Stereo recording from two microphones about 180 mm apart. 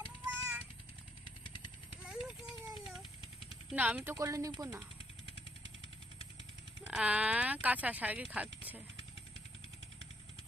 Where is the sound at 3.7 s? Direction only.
10° right (ahead or behind).